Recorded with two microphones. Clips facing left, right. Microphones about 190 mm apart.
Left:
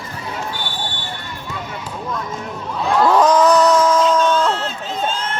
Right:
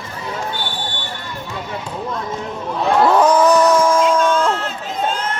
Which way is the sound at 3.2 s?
10° right (ahead or behind).